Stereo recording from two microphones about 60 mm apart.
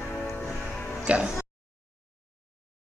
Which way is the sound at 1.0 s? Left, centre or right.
Centre.